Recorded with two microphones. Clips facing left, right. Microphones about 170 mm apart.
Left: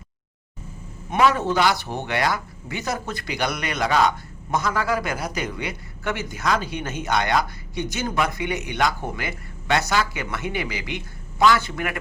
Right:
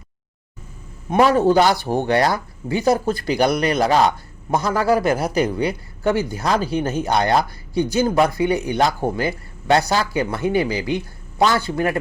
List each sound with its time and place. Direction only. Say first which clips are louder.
1.2 s speech: right 5 dB; 35° right (ahead or behind)